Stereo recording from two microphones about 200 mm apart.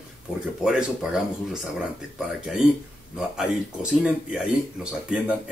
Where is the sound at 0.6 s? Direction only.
5° right (ahead or behind).